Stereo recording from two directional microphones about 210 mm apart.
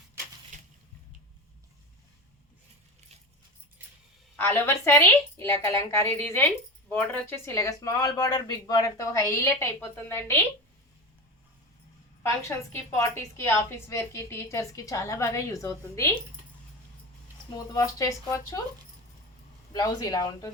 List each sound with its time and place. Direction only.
0.5 s a sound: 35° right (ahead or behind)
3.8 s a sound: 10° right (ahead or behind)
4.4 s a woman's voice: 10° left (ahead or behind)
12.2 s a woman's voice: 15° left (ahead or behind)
17.7 s a woman's voice: 15° left (ahead or behind)
19.7 s speech: 20° left (ahead or behind)